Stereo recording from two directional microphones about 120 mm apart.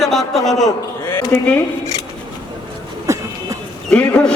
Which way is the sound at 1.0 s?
15° left (ahead or behind).